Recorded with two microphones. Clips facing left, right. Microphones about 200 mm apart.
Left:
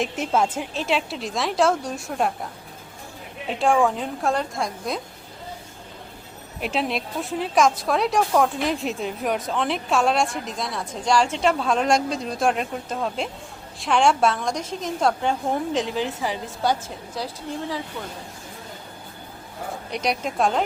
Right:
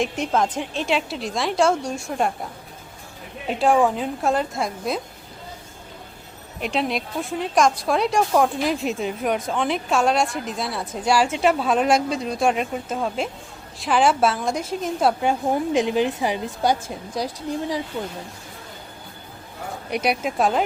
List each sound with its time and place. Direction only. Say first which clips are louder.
0.0 s speech: right 1 dB; centre (ahead or behind)
3.4 s speech: right 2 dB; centre (ahead or behind)
6.6 s a woman's voice: right 1 dB; centre (ahead or behind); by 18.1 s 25° right (ahead or behind)
19.9 s speech: right 3 dB; 5° right (ahead or behind)